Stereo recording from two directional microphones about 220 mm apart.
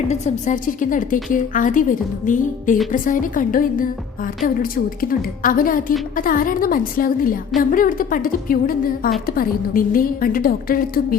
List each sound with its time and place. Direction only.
0.1 s a woman's voice: 35° left (ahead or behind)